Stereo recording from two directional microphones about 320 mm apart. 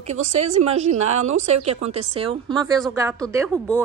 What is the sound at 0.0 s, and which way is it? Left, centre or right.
A woman's voice, right.